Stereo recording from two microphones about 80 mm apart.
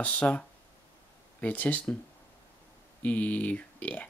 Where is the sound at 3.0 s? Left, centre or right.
Centre.